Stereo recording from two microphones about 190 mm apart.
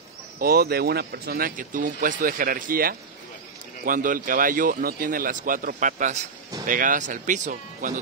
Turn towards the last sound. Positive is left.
turn(degrees=-40)  # may be behind; listen again after turning